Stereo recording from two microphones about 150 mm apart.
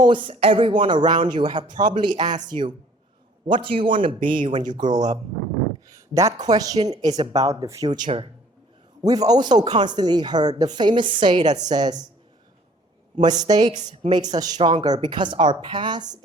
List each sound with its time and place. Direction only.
0.0 s speech: 30° right (ahead or behind)
13.2 s speech: 25° right (ahead or behind)